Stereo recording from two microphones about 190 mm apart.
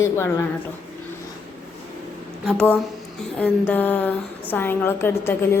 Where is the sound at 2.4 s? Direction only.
5° left (ahead or behind).